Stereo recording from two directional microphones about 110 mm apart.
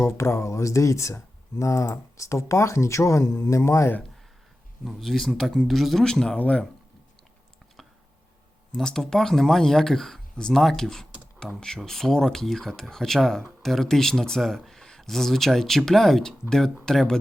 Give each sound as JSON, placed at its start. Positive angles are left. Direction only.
{"t": 0.0, "sound": "speech", "side_deg": 25}
{"t": 4.9, "sound": "speech", "side_deg": 0}
{"t": 8.7, "sound": "speech", "side_deg": 5}